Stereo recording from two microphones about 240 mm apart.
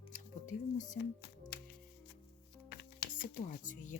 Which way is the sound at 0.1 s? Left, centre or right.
Left.